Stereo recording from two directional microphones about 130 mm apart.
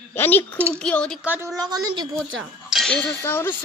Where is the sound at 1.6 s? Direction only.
30° right (ahead or behind).